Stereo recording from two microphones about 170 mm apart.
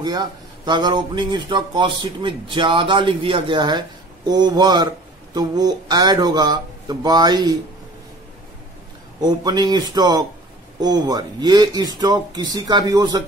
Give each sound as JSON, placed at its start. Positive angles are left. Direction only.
{"t": 0.0, "sound": "speech", "side_deg": -25}
{"t": 9.2, "sound": "speech", "side_deg": -25}